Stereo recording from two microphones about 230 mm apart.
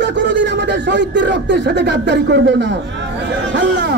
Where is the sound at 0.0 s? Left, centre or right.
Right.